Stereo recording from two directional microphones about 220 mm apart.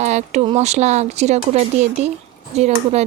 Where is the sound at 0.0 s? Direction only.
30° right (ahead or behind).